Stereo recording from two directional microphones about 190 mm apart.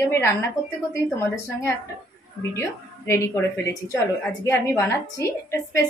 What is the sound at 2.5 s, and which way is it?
Speech, 15° left (ahead or behind).